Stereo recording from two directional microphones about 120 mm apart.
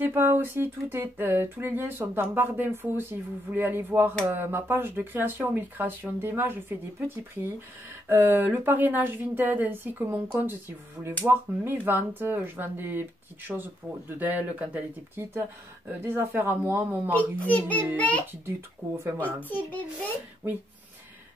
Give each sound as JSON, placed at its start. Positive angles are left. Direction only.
{"t": 0.0, "sound": "a sound", "side_deg": -20}
{"t": 4.3, "sound": "speech", "side_deg": -20}
{"t": 17.1, "sound": "a child's voice", "side_deg": 10}